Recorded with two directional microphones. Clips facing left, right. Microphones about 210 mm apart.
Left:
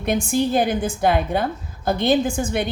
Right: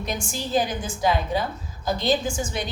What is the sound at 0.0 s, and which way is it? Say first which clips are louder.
A woman's voice: left 10 dB; 60° left (ahead or behind).